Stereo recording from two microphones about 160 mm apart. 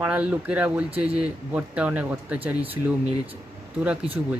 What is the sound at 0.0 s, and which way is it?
Speech, 10° right (ahead or behind).